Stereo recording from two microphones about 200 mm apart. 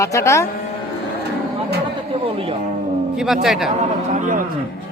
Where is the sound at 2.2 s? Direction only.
25° right (ahead or behind).